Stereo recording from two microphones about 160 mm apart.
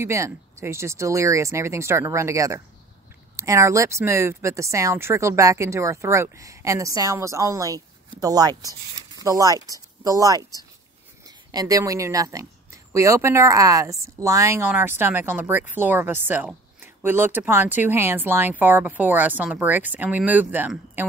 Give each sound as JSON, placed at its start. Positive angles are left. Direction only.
{"t": 0.0, "sound": "speech", "side_deg": -20}